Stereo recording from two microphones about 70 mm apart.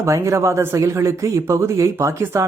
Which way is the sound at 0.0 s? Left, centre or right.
Right.